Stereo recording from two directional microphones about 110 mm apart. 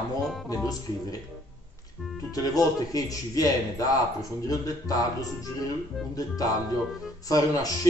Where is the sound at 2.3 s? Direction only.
35° left (ahead or behind).